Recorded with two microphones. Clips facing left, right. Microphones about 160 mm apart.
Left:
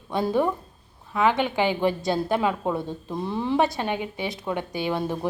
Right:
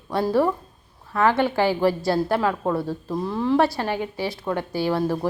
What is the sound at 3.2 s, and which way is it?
A woman's voice, 25° left (ahead or behind).